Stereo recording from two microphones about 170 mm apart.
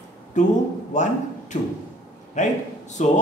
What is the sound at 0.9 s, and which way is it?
A man's voice, 45° left (ahead or behind).